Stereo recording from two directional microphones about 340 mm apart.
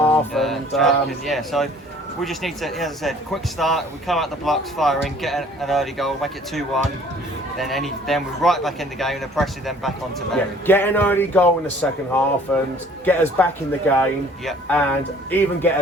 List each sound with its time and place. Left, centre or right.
0.1 s speech: centre